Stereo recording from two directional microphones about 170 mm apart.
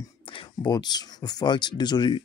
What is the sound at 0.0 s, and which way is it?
Speech, 30° left (ahead or behind).